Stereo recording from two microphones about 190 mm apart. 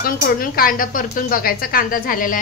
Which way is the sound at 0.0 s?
50° left (ahead or behind).